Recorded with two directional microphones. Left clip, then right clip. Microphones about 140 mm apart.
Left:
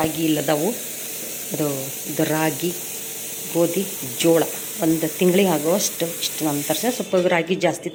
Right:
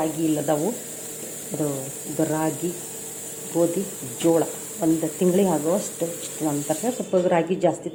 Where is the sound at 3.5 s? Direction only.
15° left (ahead or behind).